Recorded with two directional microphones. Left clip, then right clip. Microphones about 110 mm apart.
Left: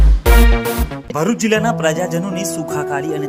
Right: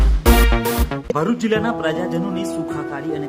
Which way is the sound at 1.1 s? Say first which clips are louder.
Left 3 dB; 20° left (ahead or behind).